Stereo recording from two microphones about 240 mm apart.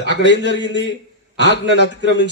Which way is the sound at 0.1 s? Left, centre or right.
Left.